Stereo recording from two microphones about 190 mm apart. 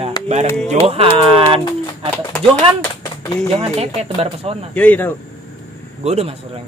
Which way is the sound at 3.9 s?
30° right (ahead or behind).